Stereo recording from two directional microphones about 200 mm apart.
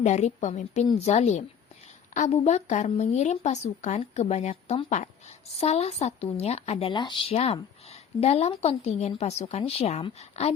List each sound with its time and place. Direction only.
0.0 s speech: 35° left (ahead or behind)